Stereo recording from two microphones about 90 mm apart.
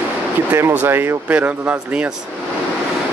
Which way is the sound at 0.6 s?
25° right (ahead or behind).